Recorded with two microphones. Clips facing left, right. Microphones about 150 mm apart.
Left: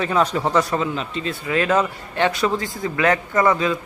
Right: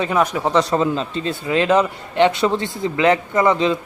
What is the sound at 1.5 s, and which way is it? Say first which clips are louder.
A man's voice: right 3 dB; 20° right (ahead or behind).